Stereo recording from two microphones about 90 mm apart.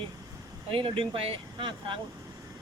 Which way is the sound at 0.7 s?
80° right.